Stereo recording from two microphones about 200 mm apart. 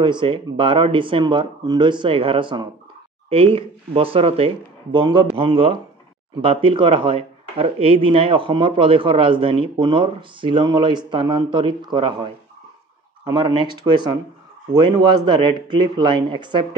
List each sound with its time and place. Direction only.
0.0 s speech: 25° right (ahead or behind)